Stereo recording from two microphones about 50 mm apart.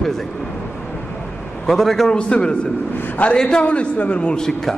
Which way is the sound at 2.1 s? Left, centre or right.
Centre.